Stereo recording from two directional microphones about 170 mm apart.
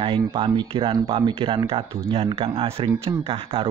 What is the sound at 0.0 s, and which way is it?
Speech, 30° right (ahead or behind).